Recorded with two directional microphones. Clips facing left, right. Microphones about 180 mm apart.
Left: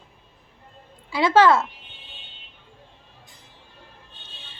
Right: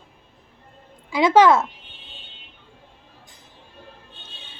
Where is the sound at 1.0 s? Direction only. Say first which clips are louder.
Right 2 dB; 15° right (ahead or behind).